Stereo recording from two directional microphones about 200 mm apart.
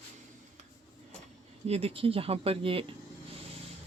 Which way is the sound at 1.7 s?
30° right (ahead or behind).